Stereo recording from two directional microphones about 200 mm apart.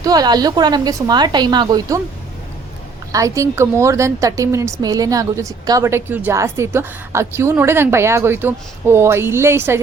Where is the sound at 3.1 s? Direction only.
15° right (ahead or behind).